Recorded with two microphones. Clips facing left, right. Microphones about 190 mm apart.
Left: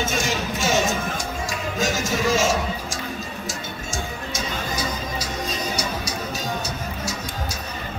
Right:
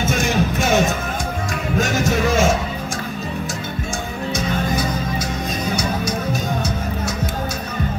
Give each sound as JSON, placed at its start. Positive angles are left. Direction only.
{"t": 0.3, "sound": "music", "side_deg": -60}